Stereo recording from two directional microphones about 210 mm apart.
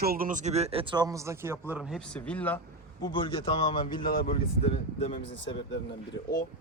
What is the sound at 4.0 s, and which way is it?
Speech, 45° left (ahead or behind).